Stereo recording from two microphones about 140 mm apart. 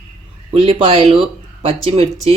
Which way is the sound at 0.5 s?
40° right (ahead or behind).